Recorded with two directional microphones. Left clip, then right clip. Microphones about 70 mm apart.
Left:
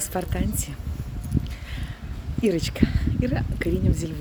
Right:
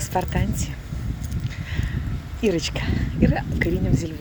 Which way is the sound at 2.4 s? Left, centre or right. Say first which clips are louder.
Right 1 dB; left.